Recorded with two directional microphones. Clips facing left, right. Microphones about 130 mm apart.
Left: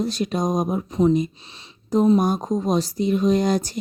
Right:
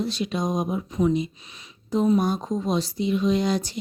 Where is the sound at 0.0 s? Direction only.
45° left (ahead or behind).